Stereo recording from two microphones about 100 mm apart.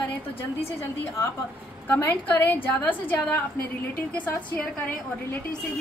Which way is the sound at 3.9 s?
15° left (ahead or behind).